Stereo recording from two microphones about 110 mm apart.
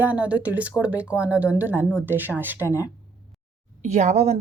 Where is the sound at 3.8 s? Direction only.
90° right; by 4.4 s 75° right (ahead or behind).